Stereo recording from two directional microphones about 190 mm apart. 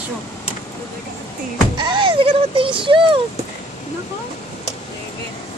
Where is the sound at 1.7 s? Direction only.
25° right (ahead or behind).